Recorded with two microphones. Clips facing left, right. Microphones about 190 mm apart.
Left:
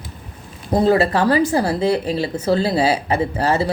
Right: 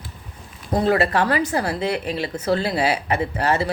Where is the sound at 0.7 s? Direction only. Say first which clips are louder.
Left 4 dB; 30° left (ahead or behind).